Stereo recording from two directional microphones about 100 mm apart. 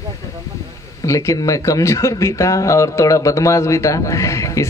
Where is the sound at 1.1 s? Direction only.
35° left (ahead or behind).